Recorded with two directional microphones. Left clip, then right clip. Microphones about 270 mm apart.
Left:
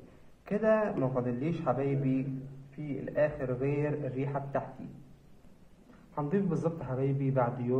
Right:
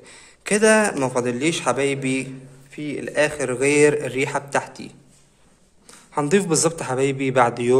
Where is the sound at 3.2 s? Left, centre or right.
Right.